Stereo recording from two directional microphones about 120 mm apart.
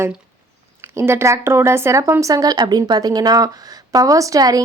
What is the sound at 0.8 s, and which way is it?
A woman's voice, 20° right (ahead or behind).